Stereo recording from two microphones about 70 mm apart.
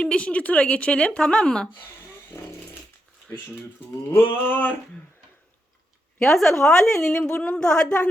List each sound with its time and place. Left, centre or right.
0.0 s speech: centre
2.3 s chainsaw: left
4.1 s a sound: left
6.1 s speech: centre